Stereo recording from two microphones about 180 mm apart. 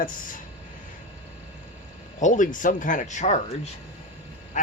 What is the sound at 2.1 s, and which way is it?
Speech, 45° left (ahead or behind).